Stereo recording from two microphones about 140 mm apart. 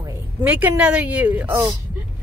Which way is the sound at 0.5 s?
10° right (ahead or behind).